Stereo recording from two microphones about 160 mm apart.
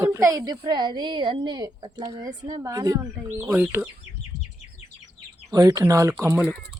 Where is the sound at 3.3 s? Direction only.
10° right (ahead or behind).